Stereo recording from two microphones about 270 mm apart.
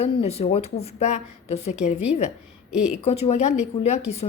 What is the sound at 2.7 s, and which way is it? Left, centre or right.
Speech, centre.